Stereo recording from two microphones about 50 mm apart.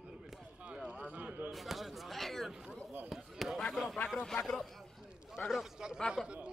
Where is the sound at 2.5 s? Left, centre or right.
Centre.